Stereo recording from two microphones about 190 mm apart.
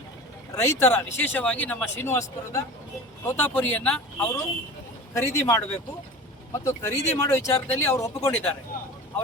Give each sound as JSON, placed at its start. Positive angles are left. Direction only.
{"t": 0.5, "sound": "speech", "side_deg": 15}